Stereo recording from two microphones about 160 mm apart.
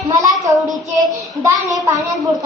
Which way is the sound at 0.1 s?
20° right (ahead or behind).